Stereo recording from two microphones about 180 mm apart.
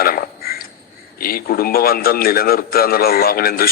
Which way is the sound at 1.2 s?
55° left (ahead or behind).